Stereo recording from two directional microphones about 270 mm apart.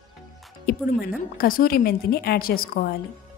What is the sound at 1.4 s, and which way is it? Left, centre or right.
A woman's voice, left.